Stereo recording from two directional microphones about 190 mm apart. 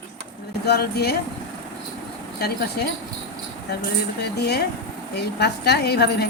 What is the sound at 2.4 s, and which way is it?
Speech, 60° left (ahead or behind).